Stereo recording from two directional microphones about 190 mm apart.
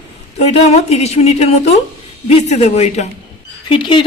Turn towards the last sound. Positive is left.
turn(degrees=25)  # may be behind; listen again after turning